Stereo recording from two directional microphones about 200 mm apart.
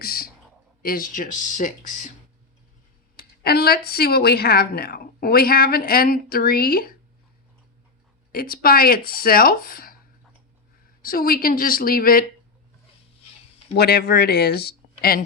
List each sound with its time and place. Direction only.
0.0 s a sound: 50° left (ahead or behind)
0.8 s speech: 45° left (ahead or behind)
3.2 s speech: 50° left (ahead or behind)
8.3 s speech: 45° left (ahead or behind)
11.0 s speech: 45° left (ahead or behind)
13.7 s speech: 50° left (ahead or behind)